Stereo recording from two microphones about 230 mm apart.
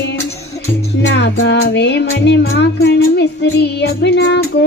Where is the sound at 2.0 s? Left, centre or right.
Left.